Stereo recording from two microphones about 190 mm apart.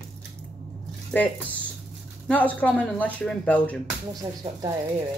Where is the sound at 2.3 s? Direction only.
10° left (ahead or behind).